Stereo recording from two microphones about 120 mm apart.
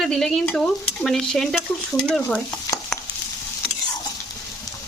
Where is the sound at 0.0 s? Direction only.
5° left (ahead or behind).